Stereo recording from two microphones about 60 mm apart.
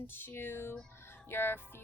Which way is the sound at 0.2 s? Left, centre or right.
Left.